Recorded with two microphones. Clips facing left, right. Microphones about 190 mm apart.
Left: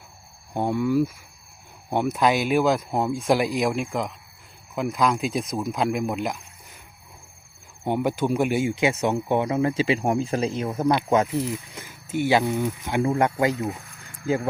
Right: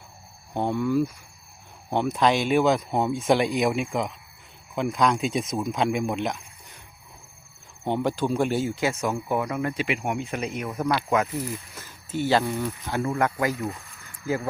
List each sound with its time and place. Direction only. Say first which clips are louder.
0.5 s speech: left 2 dB; 10° left (ahead or behind)
7.9 s speech: left 1 dB; 10° left (ahead or behind)